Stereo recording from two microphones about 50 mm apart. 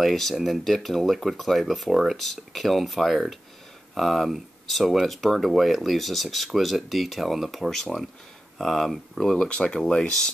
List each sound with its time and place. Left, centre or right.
0.0 s speech: centre
2.1 s speech: centre